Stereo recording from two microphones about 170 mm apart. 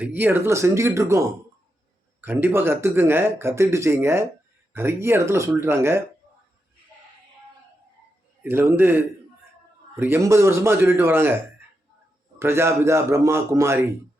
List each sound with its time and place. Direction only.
0.0 s speech: 10° right (ahead or behind)
2.2 s speech: 10° right (ahead or behind)
8.4 s speech: 15° right (ahead or behind)
12.4 s speech: 15° right (ahead or behind)